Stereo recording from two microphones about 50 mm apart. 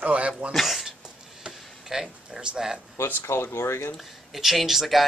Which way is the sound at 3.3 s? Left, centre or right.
Left.